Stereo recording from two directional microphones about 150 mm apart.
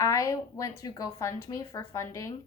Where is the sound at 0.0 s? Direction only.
20° left (ahead or behind).